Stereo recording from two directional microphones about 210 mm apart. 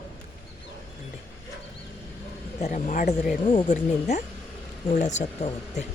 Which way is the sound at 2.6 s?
35° left (ahead or behind).